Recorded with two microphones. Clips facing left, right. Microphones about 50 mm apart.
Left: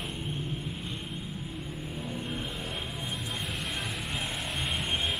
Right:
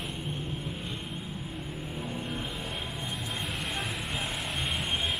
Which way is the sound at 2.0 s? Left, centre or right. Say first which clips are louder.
Even; centre.